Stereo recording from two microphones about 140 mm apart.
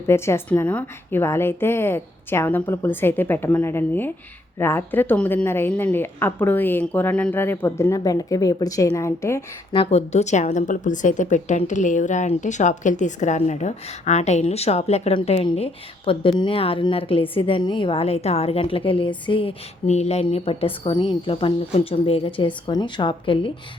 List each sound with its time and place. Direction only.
0.1 s a woman's voice: 15° left (ahead or behind)
9.7 s a woman's voice: 45° left (ahead or behind)